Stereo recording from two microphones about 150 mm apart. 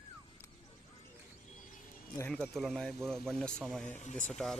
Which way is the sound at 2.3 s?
5° left (ahead or behind).